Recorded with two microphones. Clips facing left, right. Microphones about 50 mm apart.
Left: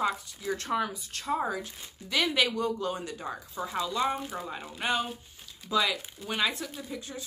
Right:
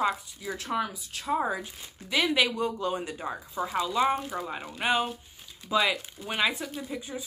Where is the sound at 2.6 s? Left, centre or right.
Right.